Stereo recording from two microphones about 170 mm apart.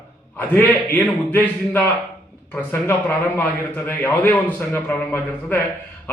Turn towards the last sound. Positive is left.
turn(degrees=15)  # may be behind; listen again after turning